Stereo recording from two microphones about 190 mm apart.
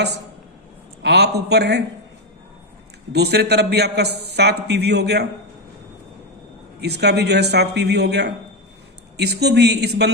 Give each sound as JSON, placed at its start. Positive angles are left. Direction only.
{"t": 1.0, "sound": "a man's voice", "side_deg": -60}
{"t": 3.1, "sound": "a man's voice", "side_deg": -60}
{"t": 6.7, "sound": "a man's voice", "side_deg": -60}